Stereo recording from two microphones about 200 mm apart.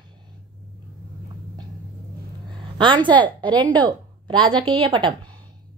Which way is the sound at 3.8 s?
20° right (ahead or behind).